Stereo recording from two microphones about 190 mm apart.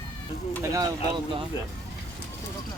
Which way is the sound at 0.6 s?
15° right (ahead or behind).